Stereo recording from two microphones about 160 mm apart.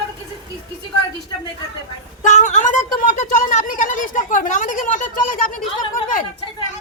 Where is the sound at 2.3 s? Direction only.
50° left (ahead or behind).